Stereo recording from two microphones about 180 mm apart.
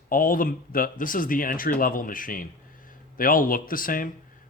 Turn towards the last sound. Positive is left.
turn(degrees=50)  # may be behind; listen again after turning